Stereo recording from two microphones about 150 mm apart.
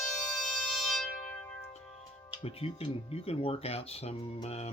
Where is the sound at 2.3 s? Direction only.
40° left (ahead or behind).